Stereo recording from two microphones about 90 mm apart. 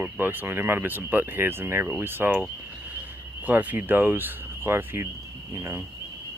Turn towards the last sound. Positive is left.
turn(degrees=-30)  # may be behind; listen again after turning